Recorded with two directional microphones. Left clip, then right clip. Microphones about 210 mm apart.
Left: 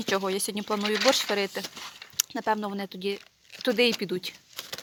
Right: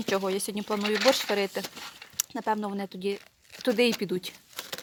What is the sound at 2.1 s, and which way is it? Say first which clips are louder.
Speech: left 2 dB; centre (ahead or behind).